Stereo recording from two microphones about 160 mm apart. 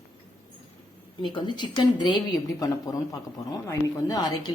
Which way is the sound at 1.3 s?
30° left (ahead or behind).